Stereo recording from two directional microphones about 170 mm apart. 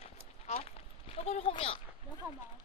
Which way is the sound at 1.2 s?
35° left (ahead or behind).